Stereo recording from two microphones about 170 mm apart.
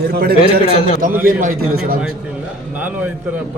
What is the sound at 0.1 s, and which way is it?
Speech, 65° right (ahead or behind).